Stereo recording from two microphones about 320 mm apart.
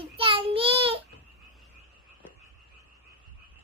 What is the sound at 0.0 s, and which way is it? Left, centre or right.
Child singing, centre.